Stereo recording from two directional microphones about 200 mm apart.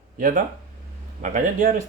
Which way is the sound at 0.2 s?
40° right (ahead or behind).